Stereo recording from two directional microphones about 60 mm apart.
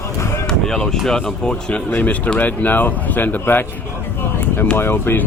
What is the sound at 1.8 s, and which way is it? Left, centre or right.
Speech, left.